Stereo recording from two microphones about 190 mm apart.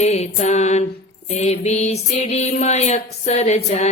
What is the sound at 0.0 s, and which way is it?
Music, 35° left (ahead or behind).